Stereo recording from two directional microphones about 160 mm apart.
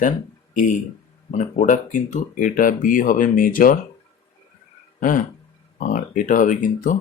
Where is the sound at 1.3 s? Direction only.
50° left (ahead or behind).